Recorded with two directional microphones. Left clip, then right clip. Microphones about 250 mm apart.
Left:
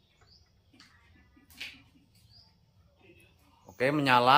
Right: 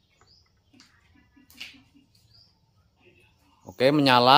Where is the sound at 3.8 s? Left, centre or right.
Right.